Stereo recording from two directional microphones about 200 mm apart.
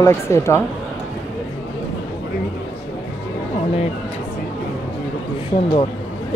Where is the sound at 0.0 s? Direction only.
15° left (ahead or behind).